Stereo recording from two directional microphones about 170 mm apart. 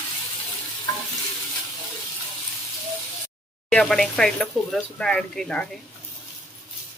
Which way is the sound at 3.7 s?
5° left (ahead or behind).